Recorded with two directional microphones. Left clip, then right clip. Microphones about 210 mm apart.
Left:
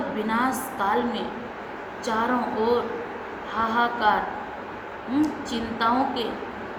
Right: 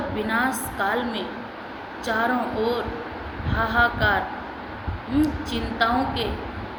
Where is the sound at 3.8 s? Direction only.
65° left (ahead or behind).